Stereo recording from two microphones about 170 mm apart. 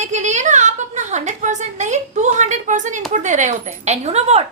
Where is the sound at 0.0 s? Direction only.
45° right (ahead or behind).